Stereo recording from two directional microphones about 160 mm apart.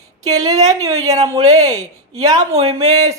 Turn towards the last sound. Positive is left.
turn(degrees=-20)  # may be behind; listen again after turning